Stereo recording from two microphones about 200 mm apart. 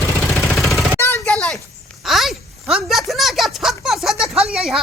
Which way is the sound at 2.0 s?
Centre (ahead or behind).